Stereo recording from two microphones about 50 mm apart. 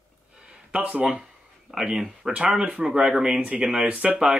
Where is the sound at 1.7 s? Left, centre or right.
Centre.